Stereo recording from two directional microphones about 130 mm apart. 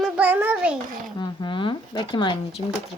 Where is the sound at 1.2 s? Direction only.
35° left (ahead or behind).